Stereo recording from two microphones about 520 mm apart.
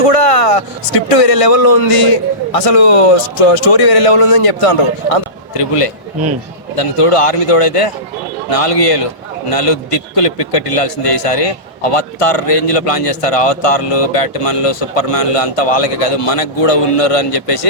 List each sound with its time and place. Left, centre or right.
0.0 s a man's voice: left